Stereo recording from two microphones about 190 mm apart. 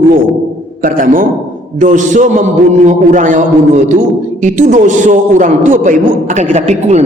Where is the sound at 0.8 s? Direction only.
45° right (ahead or behind).